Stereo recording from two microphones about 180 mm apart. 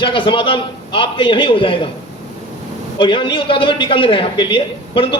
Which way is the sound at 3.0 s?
25° left (ahead or behind).